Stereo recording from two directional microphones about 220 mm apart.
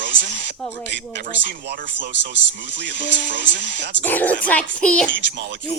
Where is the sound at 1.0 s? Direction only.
50° right (ahead or behind).